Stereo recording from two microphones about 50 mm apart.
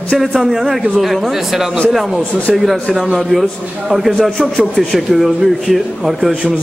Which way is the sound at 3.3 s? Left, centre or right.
Centre.